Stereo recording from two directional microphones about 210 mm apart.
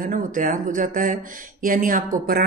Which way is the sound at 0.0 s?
40° right (ahead or behind).